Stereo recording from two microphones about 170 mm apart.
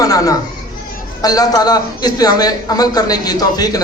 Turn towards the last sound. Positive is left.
turn(degrees=20)  # may be behind; listen again after turning